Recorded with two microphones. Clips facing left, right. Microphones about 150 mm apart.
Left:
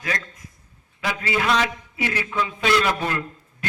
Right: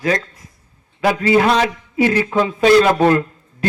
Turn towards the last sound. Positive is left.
turn(degrees=-40)  # may be behind; listen again after turning